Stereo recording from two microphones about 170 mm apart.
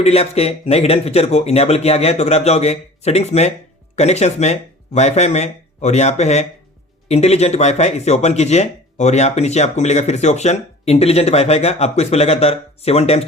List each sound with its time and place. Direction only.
0.0 s speech: 40° left (ahead or behind)